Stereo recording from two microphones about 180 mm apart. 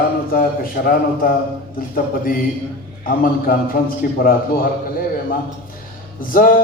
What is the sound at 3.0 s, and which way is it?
A man's voice, 55° left (ahead or behind).